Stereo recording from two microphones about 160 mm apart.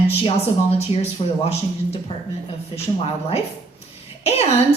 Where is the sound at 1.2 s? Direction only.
35° left (ahead or behind).